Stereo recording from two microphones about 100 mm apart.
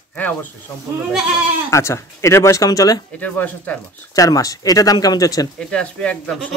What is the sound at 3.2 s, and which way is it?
Speech, 15° left (ahead or behind).